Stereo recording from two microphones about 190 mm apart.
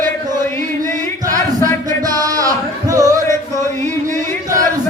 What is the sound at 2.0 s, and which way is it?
Music, 20° right (ahead or behind).